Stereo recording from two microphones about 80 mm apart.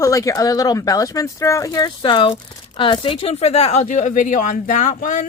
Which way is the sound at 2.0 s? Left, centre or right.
Left.